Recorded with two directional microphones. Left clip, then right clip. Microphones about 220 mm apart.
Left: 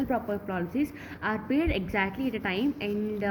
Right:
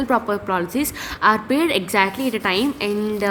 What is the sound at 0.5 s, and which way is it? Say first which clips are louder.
A woman's voice: right 9 dB; 15° right (ahead or behind).